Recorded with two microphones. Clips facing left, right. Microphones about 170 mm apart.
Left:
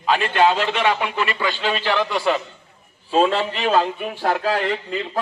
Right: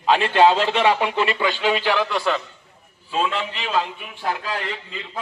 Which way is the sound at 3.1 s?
35° left (ahead or behind).